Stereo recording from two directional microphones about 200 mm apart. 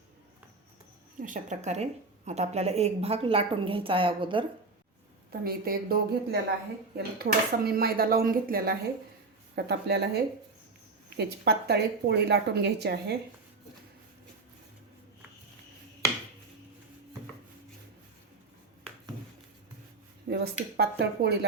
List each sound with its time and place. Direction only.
1.2 s a woman's voice: 40° right (ahead or behind)
5.3 s a woman's voice: 50° right (ahead or behind)
20.2 s dishes: 55° right (ahead or behind)
20.7 s speech: 55° right (ahead or behind)